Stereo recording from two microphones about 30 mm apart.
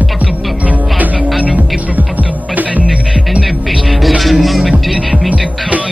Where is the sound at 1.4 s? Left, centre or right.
Right.